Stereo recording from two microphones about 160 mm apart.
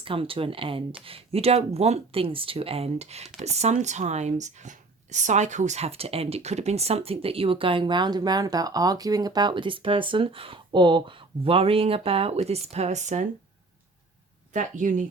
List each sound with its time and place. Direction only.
0.0 s speech: 35° right (ahead or behind)
14.5 s speech: 55° right (ahead or behind)